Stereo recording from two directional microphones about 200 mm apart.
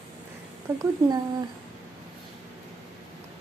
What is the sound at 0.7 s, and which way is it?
Speech, 10° right (ahead or behind).